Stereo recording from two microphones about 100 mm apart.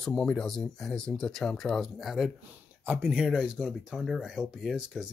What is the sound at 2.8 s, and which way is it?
Speech, 20° right (ahead or behind).